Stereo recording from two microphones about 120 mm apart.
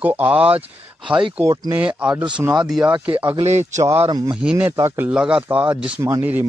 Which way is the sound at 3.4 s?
70° right (ahead or behind).